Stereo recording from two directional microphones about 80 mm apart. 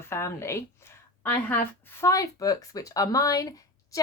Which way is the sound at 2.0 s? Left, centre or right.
Left.